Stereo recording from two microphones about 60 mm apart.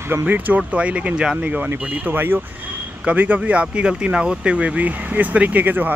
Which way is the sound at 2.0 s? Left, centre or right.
Right.